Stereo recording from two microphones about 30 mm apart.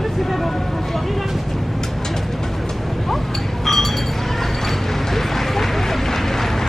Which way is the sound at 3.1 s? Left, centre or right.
Centre.